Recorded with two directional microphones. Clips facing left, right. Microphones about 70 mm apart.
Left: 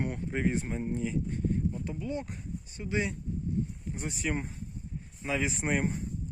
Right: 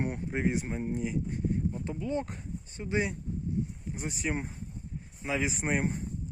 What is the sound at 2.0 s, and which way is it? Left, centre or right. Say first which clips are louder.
Speech: right 3 dB; right.